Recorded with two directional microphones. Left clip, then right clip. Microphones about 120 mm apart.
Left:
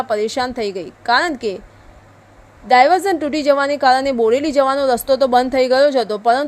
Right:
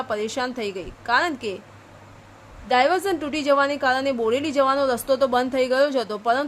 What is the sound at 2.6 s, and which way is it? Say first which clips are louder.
A woman's voice: left 8 dB; 50° left (ahead or behind).